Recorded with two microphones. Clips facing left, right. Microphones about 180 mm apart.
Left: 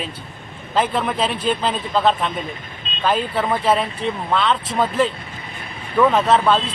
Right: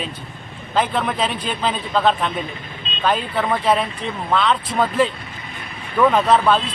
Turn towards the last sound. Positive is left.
turn(degrees=0)  # may be behind; listen again after turning